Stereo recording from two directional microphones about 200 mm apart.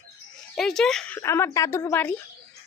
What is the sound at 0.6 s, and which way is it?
A woman's voice, centre (ahead or behind).